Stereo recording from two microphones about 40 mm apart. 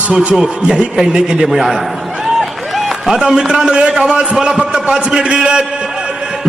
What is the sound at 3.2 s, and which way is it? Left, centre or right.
A man's voice, right.